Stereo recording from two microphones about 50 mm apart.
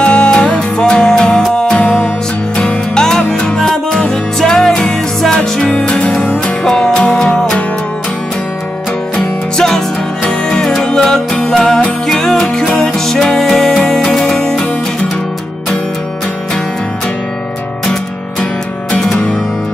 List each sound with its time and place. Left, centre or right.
0.0 s music: left
10.8 s music: centre